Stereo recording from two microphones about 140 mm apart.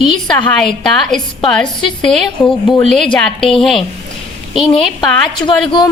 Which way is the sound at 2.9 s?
5° left (ahead or behind).